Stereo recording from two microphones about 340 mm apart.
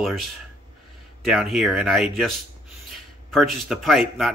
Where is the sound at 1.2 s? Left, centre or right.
Centre.